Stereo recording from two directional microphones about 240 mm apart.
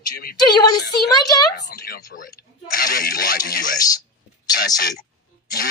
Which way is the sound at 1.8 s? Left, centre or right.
Left.